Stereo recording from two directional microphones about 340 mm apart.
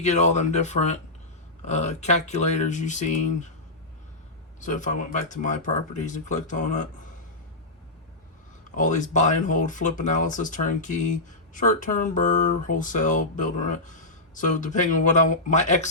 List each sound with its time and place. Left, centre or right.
0.0 s speech: centre
4.6 s speech: left
8.7 s speech: left